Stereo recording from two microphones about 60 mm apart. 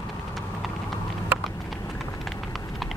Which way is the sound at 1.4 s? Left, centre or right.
Centre.